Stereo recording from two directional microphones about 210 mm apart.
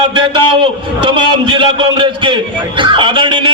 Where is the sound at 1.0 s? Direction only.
25° right (ahead or behind).